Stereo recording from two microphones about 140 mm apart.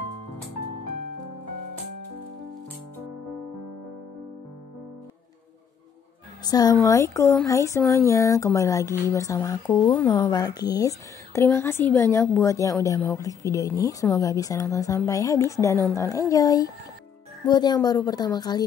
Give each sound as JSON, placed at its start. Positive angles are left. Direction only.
{"t": 6.4, "sound": "a woman's voice", "side_deg": 25}